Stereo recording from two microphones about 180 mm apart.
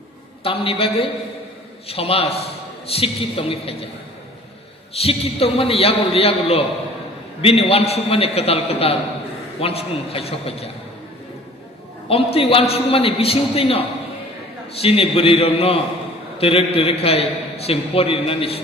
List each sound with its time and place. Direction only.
0.4 s a man's voice: 30° left (ahead or behind)
4.9 s a man's voice: 35° left (ahead or behind)
12.1 s a man's voice: 35° left (ahead or behind)